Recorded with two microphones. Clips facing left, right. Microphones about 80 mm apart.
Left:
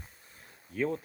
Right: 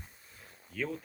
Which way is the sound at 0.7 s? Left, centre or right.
Left.